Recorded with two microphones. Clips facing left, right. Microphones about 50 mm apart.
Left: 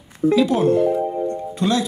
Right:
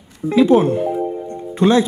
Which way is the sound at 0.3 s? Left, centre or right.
Right.